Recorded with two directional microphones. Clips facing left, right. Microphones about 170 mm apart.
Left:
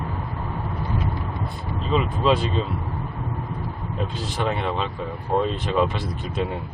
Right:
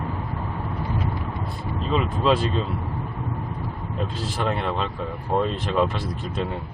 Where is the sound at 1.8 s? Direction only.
Centre (ahead or behind).